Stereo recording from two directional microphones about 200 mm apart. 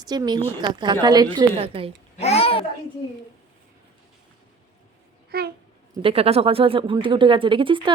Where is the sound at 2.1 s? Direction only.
30° left (ahead or behind).